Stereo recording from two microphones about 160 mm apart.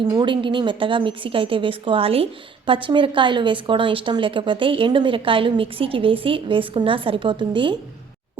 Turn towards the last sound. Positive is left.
turn(degrees=-30)  # may be behind; listen again after turning